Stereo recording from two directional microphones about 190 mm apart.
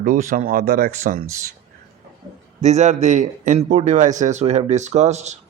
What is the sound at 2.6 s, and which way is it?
Speech, 40° right (ahead or behind).